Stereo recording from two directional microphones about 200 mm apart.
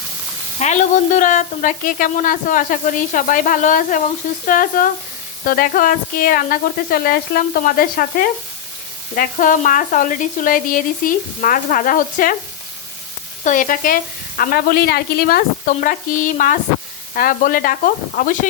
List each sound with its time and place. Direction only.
0.6 s sizzle: 35° left (ahead or behind)
13.4 s sizzle: 40° left (ahead or behind)